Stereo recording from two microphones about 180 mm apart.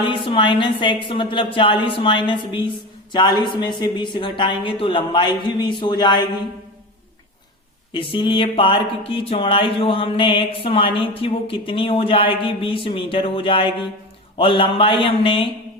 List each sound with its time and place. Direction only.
0.0 s a woman's voice: 30° left (ahead or behind)
7.9 s a woman's voice: 30° left (ahead or behind)